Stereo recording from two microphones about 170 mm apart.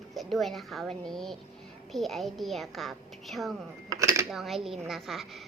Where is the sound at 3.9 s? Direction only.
15° right (ahead or behind).